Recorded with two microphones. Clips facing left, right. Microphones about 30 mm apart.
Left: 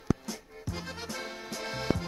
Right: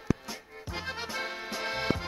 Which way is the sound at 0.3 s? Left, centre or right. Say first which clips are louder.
Even; right.